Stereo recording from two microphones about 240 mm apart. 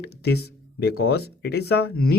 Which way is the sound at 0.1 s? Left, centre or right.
Left.